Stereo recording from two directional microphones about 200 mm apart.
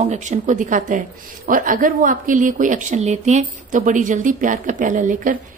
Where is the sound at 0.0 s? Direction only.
35° right (ahead or behind).